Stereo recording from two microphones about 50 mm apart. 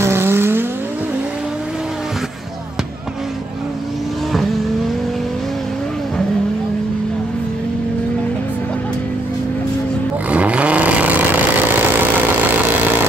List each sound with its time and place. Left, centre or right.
0.0 s vehicle: right
10.3 s vehicle: right